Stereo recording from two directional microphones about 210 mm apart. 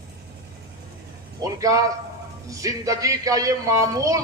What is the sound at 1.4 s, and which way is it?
Speech, 15° right (ahead or behind).